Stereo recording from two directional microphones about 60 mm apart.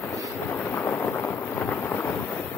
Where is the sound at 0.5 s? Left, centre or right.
Left.